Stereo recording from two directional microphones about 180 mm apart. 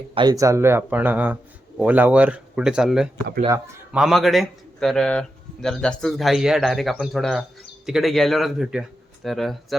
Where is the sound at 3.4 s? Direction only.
15° right (ahead or behind).